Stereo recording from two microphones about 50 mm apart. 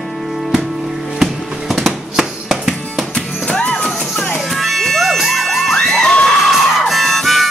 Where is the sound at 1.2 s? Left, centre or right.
Centre.